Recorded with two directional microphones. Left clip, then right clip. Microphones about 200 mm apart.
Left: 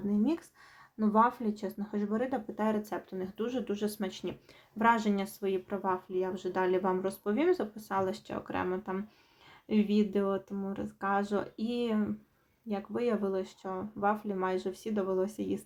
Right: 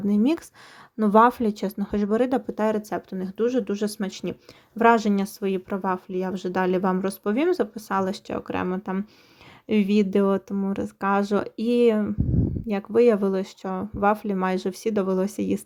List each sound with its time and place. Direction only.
0.1 s speech: 40° right (ahead or behind)